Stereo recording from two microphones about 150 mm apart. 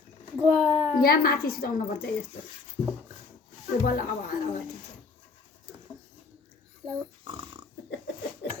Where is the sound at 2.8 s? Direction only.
40° left (ahead or behind).